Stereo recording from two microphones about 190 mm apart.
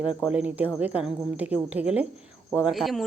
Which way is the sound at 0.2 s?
5° right (ahead or behind).